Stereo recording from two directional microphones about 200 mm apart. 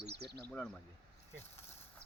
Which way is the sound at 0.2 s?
55° right (ahead or behind).